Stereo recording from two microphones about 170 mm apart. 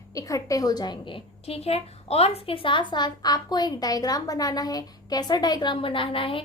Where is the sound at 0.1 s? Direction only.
20° left (ahead or behind).